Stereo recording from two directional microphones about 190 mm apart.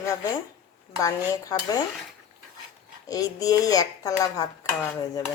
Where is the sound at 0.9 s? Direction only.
15° left (ahead or behind).